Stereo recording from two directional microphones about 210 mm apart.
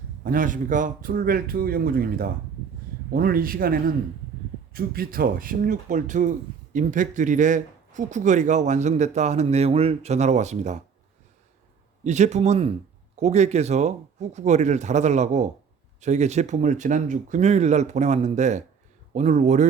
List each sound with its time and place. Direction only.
0.3 s speech: 40° right (ahead or behind)
12.0 s speech: 35° right (ahead or behind)